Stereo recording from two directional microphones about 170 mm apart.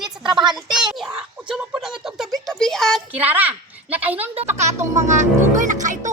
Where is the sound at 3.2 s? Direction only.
10° right (ahead or behind).